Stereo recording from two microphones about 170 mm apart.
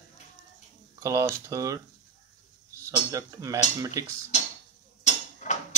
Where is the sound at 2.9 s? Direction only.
20° right (ahead or behind).